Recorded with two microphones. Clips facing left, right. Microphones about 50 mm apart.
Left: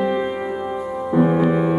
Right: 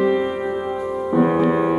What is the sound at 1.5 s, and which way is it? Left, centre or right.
Music, centre.